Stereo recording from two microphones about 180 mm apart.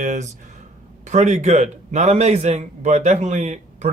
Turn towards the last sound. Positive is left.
turn(degrees=-40)  # may be behind; listen again after turning